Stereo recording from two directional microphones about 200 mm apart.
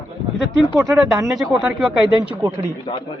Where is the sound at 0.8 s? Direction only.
Centre (ahead or behind).